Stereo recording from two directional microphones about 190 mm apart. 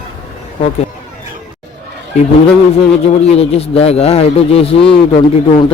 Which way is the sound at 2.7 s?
35° left (ahead or behind).